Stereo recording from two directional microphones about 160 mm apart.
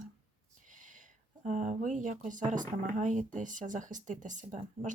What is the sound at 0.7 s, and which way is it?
Speech, 55° right (ahead or behind).